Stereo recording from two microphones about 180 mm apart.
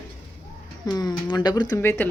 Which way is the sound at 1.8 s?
10° left (ahead or behind).